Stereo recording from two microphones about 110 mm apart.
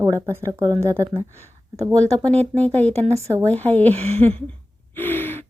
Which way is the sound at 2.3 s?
70° right (ahead or behind).